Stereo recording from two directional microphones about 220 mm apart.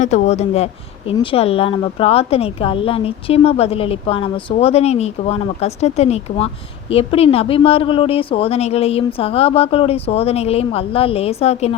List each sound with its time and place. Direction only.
0.0 s speech: 30° left (ahead or behind)